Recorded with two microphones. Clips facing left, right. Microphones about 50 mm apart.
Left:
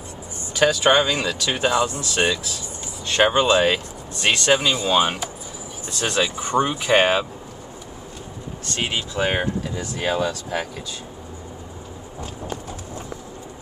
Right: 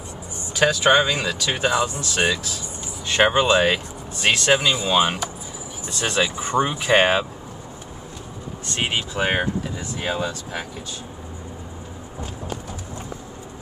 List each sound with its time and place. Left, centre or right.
0.6 s speech: centre
8.7 s speech: right